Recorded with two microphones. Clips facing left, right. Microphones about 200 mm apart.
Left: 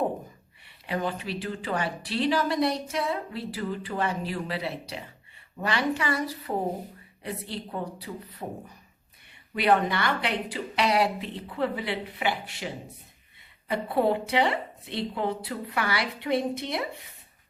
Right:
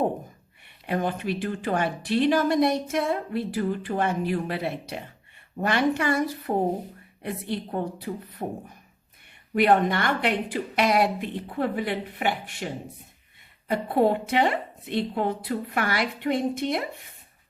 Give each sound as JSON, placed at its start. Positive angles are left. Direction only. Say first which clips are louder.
{"t": 0.9, "sound": "a woman's voice", "louder": "right 4 dB", "side_deg": -50}